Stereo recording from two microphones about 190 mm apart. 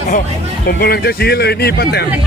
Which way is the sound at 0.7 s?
55° left (ahead or behind).